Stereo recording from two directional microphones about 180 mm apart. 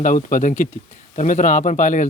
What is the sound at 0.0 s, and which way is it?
Speech, 45° left (ahead or behind).